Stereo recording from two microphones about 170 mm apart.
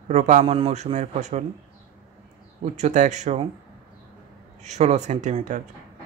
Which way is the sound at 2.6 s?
45° right (ahead or behind).